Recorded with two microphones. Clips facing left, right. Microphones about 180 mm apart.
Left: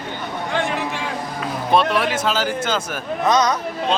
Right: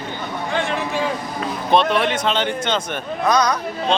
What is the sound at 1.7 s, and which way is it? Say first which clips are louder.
Speech: right 1 dB; 5° left (ahead or behind).